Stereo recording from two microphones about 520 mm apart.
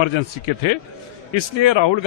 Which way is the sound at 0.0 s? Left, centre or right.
Left.